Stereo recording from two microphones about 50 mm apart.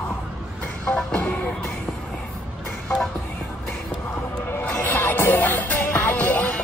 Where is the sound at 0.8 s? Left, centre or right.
Left.